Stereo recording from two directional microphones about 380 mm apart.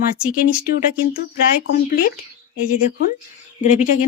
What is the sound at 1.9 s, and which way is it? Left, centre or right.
Speech, left.